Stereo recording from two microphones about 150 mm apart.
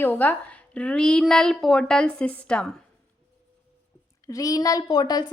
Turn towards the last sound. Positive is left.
turn(degrees=30)  # may be behind; listen again after turning